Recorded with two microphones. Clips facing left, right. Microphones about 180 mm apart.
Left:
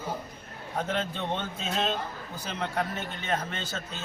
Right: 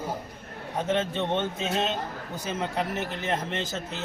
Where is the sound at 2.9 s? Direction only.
80° right.